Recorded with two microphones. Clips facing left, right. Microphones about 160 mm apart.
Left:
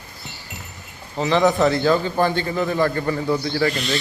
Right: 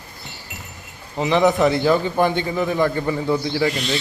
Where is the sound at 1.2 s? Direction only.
15° right (ahead or behind).